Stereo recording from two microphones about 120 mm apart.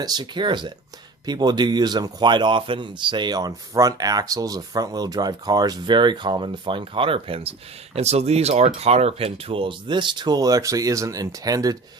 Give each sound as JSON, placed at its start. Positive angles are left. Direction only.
{"t": 0.0, "sound": "speech", "side_deg": -35}